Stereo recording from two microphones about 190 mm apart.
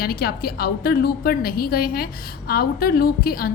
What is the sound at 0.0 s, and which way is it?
A woman's voice, 55° left (ahead or behind).